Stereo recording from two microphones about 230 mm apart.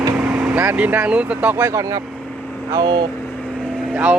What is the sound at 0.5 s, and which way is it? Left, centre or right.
Speech, centre.